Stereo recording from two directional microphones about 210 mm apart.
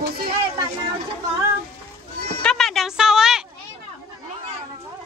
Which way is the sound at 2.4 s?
5° left (ahead or behind).